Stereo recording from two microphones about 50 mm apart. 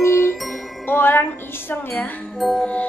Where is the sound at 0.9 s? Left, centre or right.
Left.